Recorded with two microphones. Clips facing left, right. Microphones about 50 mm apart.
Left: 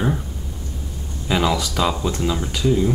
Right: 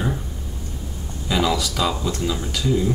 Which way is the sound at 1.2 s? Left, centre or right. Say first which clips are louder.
Left 1 dB; left.